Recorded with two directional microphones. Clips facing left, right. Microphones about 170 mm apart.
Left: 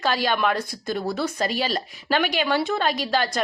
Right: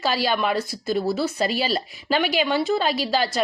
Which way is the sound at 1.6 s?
10° right (ahead or behind).